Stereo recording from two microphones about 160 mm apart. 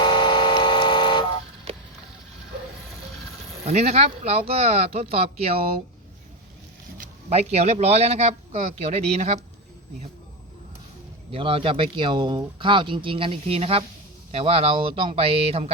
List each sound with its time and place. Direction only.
0.0 s vehicle: 30° left (ahead or behind)
3.7 s speech: 45° right (ahead or behind)
7.0 s speech: 40° right (ahead or behind)
11.3 s speech: 35° right (ahead or behind)